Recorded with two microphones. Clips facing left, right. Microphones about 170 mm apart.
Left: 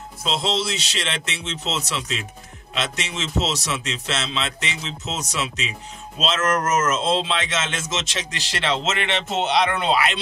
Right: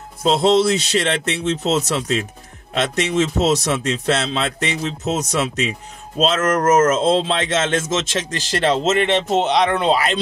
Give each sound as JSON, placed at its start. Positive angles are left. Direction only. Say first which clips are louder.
{"t": 0.2, "sound": "speech", "louder": "right 10 dB", "side_deg": -50}